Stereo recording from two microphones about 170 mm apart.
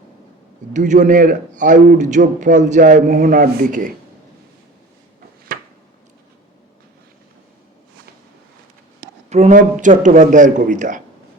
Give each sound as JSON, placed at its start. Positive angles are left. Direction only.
{"t": 0.7, "sound": "a man's voice", "side_deg": -45}
{"t": 9.3, "sound": "a man's voice", "side_deg": -45}